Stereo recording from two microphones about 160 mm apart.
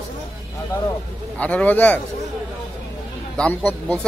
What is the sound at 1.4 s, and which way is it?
Speech, 10° left (ahead or behind).